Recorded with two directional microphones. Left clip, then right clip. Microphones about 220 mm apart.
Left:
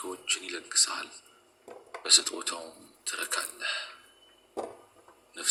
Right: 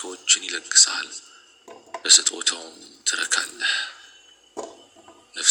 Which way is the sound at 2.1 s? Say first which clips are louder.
Right 7 dB; 10° right (ahead or behind).